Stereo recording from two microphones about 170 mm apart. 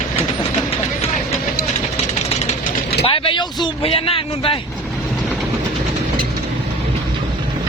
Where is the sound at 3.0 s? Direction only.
30° left (ahead or behind).